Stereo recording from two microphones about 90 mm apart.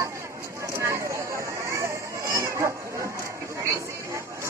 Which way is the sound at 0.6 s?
35° right (ahead or behind).